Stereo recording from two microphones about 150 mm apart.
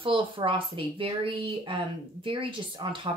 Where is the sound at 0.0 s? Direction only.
35° right (ahead or behind).